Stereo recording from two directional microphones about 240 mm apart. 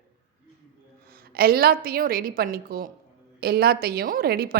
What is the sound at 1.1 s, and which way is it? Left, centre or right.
A woman's voice, right.